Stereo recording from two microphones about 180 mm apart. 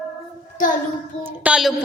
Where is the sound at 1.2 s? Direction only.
5° right (ahead or behind).